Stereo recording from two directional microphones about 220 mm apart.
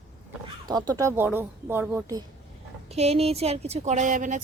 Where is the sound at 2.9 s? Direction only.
30° right (ahead or behind).